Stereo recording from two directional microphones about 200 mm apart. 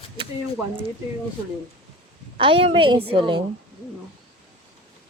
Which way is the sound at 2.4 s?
30° right (ahead or behind).